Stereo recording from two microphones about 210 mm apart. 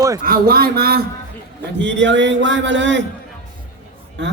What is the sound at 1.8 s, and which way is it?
Speech, 60° right (ahead or behind).